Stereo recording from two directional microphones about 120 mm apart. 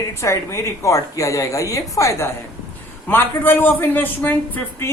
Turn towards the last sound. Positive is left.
turn(degrees=15)  # may be behind; listen again after turning